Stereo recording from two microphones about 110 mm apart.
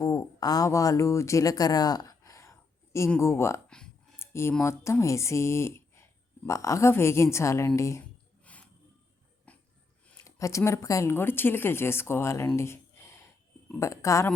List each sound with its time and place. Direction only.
0.0 s speech: 35° left (ahead or behind)
4.2 s a sound: 25° left (ahead or behind)
4.6 s speech: 25° left (ahead or behind)
8.5 s wild animals: 10° left (ahead or behind)
9.5 s a sound: 10° left (ahead or behind)
10.2 s speech: 30° left (ahead or behind)